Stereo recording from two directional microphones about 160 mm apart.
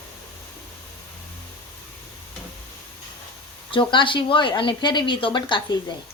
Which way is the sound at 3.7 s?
30° left (ahead or behind).